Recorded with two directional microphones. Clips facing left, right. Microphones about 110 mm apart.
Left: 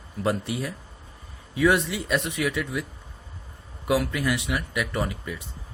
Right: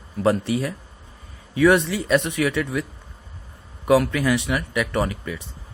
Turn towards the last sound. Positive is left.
turn(degrees=-90)